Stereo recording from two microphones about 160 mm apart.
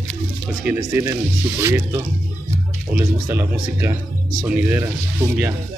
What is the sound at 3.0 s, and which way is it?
Speech, 15° right (ahead or behind).